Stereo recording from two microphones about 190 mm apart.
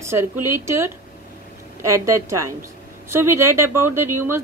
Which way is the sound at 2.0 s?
15° right (ahead or behind).